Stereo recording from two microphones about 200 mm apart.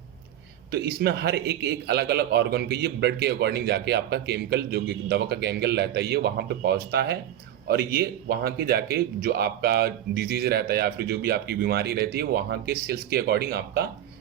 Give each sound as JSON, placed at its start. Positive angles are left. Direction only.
{"t": 0.7, "sound": "a man's voice", "side_deg": -50}